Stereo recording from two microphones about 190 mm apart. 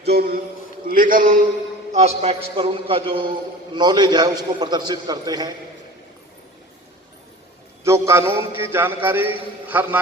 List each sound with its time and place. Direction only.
0.0 s a man's voice: 55° right (ahead or behind); by 5.5 s 20° right (ahead or behind)
7.9 s a man's voice: 15° right (ahead or behind)